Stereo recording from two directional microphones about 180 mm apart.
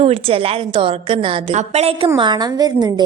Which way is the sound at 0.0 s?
30° right (ahead or behind).